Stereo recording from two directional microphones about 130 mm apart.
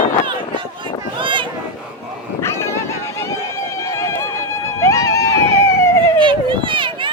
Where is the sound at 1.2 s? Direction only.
40° right (ahead or behind).